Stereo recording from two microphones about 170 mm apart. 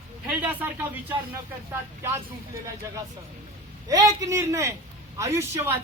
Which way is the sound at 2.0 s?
15° right (ahead or behind).